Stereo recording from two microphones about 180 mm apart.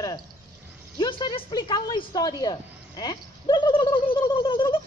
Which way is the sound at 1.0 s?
25° left (ahead or behind).